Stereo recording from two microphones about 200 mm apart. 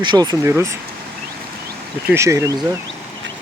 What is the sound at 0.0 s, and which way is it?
Speech, 20° right (ahead or behind).